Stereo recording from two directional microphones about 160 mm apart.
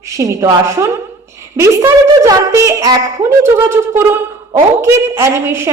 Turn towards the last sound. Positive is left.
turn(degrees=-15)  # may be behind; listen again after turning